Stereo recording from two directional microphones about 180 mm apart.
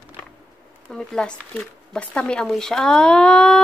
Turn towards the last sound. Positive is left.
turn(degrees=5)  # may be behind; listen again after turning